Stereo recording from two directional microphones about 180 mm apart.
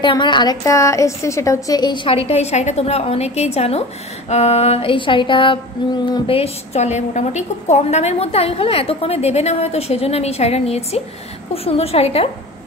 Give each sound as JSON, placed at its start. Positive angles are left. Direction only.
{"t": 0.0, "sound": "a woman's voice", "side_deg": 25}